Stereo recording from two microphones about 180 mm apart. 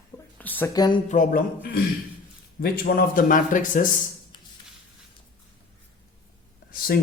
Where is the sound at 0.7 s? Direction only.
20° left (ahead or behind).